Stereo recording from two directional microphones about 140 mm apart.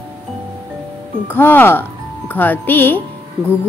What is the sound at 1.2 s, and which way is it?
Speech, 15° left (ahead or behind).